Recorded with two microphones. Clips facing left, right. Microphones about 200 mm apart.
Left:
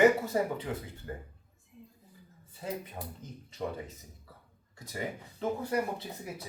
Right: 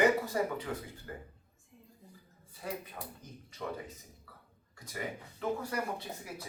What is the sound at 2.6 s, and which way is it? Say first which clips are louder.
Speech: left 3 dB; 20° left (ahead or behind).